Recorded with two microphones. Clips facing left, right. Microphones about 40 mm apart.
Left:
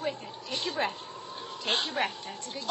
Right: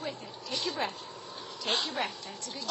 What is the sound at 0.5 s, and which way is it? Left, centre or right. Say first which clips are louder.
A woman's voice: left 2 dB; left.